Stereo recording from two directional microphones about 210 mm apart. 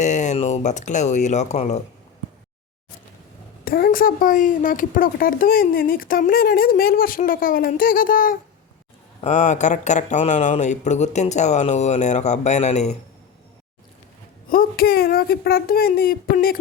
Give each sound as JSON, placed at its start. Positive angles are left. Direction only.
{"t": 0.0, "sound": "speech", "side_deg": 35}
{"t": 3.6, "sound": "a woman's voice", "side_deg": 45}
{"t": 14.5, "sound": "a woman's voice", "side_deg": 45}